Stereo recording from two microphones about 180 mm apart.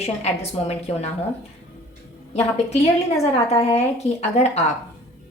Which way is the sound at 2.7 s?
35° left (ahead or behind).